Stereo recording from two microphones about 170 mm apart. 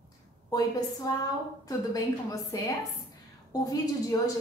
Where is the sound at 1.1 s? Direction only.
20° left (ahead or behind).